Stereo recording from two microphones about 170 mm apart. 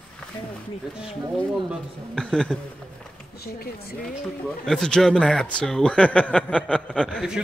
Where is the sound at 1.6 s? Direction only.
5° left (ahead or behind).